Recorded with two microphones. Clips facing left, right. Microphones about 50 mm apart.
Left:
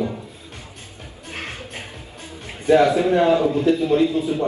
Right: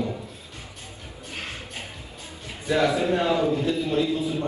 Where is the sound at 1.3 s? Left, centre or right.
Left.